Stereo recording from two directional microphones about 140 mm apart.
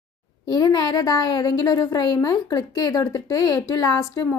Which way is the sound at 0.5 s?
30° left (ahead or behind).